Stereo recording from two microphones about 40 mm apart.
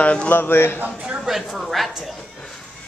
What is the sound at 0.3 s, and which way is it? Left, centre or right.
Speech, left.